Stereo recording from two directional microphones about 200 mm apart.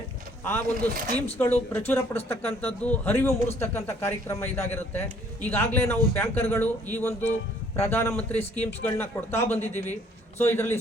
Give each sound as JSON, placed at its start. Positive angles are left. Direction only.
{"t": 0.4, "sound": "a man's voice", "side_deg": 10}
{"t": 0.9, "sound": "speech", "side_deg": -45}
{"t": 1.9, "sound": "a man's voice", "side_deg": 10}